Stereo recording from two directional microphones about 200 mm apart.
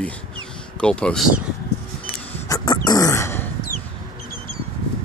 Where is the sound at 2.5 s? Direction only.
20° left (ahead or behind).